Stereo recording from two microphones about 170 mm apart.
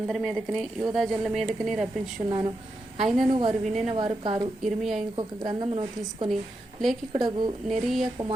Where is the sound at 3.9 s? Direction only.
30° right (ahead or behind).